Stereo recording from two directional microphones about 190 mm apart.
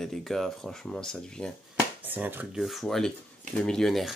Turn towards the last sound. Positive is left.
turn(degrees=0)  # may be behind; listen again after turning